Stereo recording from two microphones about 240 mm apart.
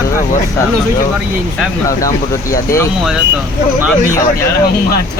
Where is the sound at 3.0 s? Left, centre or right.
Centre.